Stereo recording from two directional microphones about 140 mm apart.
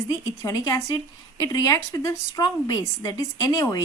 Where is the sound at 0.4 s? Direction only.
25° left (ahead or behind).